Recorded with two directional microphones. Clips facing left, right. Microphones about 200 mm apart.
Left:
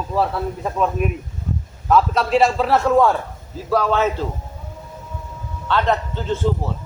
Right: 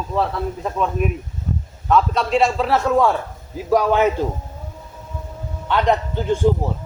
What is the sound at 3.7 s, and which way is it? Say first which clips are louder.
Speech: right 2 dB; 15° right (ahead or behind).